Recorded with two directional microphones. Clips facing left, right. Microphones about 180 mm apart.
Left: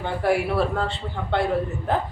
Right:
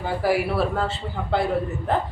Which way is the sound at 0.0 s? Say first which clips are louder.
Even; 5° right (ahead or behind).